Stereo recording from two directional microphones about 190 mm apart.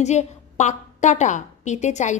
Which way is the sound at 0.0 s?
35° left (ahead or behind).